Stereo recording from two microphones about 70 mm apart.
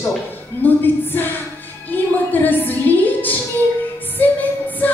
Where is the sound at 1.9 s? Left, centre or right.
Left.